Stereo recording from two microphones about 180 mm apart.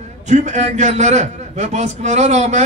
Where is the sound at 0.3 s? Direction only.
40° right (ahead or behind).